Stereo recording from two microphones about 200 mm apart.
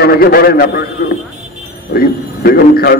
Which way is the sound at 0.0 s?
50° left (ahead or behind).